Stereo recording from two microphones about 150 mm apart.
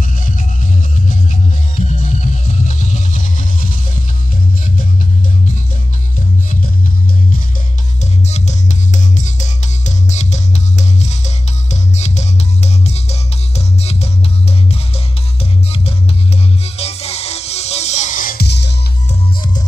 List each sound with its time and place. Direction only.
1.8 s music: 50° left (ahead or behind)
8.0 s music: 50° left (ahead or behind)
16.6 s music: 45° left (ahead or behind); by 18.6 s 85° left